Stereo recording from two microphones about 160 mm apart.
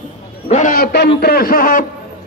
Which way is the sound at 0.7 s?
90° left.